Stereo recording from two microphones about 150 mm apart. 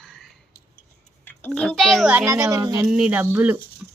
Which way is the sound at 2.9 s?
5° right (ahead or behind).